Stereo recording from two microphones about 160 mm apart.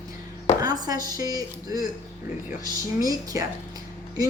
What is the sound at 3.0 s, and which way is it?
Speech, 20° right (ahead or behind).